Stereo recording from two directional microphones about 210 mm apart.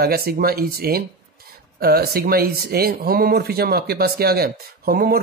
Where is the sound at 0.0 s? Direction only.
45° right (ahead or behind).